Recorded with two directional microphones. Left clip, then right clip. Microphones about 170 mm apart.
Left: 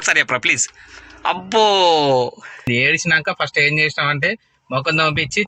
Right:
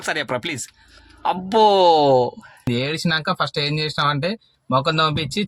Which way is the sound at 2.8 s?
30° left (ahead or behind).